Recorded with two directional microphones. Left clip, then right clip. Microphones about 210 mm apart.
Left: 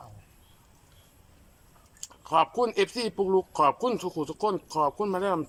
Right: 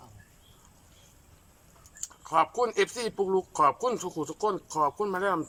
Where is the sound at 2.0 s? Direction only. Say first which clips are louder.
Left 1 dB; 5° left (ahead or behind).